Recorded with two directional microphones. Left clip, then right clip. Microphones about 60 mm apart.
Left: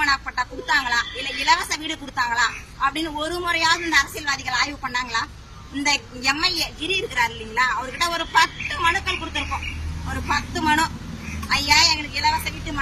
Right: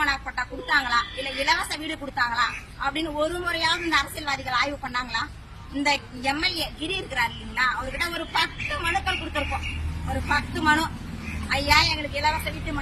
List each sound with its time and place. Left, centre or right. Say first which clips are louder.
0.7 s a woman's voice: left 1 dB; centre